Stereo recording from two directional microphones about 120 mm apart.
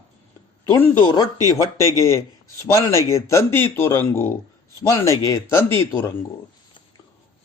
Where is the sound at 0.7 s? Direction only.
15° left (ahead or behind).